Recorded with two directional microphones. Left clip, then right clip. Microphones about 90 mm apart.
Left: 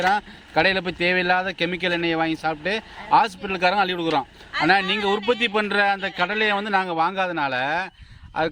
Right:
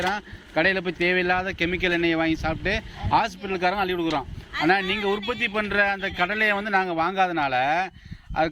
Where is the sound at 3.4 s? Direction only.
70° left (ahead or behind); by 7.1 s 40° left (ahead or behind).